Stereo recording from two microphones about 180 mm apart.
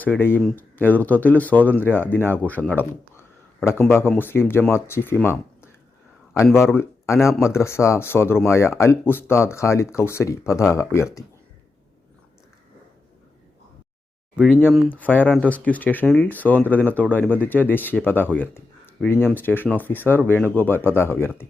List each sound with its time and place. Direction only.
0.0 s speech: 10° left (ahead or behind)
14.3 s speech: 5° left (ahead or behind)